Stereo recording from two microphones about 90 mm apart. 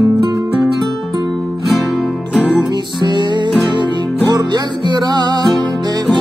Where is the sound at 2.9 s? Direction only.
55° right (ahead or behind).